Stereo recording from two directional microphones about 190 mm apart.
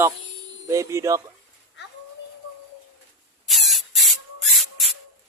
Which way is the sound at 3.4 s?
Centre (ahead or behind).